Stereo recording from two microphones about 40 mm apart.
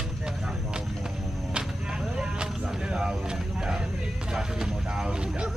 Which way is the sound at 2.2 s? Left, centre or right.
Right.